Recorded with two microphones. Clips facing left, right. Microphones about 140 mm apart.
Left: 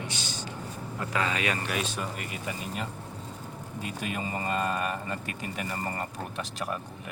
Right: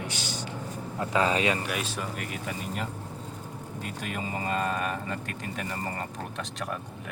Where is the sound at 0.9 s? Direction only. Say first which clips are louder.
Right 5 dB; 30° right (ahead or behind).